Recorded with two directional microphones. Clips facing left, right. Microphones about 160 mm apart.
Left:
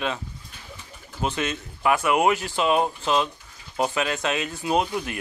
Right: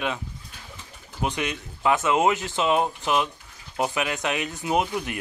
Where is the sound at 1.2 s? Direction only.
15° right (ahead or behind).